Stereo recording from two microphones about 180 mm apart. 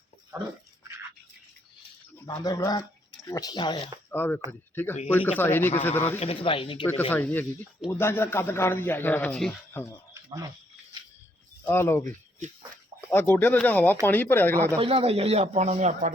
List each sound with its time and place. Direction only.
0.3 s speech: 15° right (ahead or behind)
2.1 s speech: 20° left (ahead or behind)
4.1 s a man's voice: 10° left (ahead or behind)
6.1 s speech: 30° left (ahead or behind)
6.8 s a man's voice: 10° left (ahead or behind)
11.6 s a man's voice: 15° left (ahead or behind)
14.8 s speech: 35° right (ahead or behind)